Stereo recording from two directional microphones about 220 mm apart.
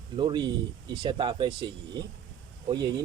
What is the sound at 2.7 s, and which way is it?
Speech, 20° right (ahead or behind).